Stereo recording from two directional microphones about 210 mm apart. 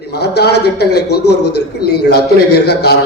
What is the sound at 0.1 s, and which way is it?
A man's voice, 50° left (ahead or behind).